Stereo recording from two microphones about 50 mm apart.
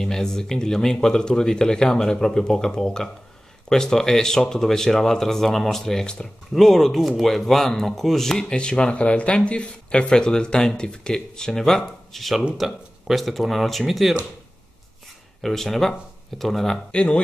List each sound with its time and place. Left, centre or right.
0.0 s speech: centre
15.4 s speech: centre
16.9 s speech: left